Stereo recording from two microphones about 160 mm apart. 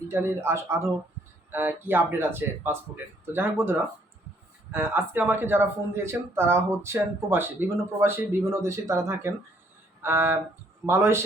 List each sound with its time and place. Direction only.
0.1 s speech: 15° right (ahead or behind)